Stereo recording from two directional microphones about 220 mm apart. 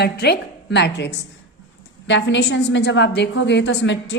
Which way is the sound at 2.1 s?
55° left (ahead or behind).